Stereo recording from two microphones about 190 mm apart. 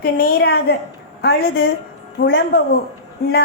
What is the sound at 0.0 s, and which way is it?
Speech, 55° left (ahead or behind).